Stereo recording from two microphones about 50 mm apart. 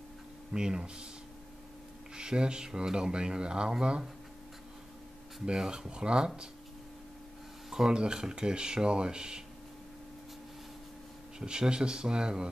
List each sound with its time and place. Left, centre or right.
0.5 s speech: centre
2.1 s speech: centre
5.4 s speech: centre
7.7 s speech: centre
11.3 s speech: centre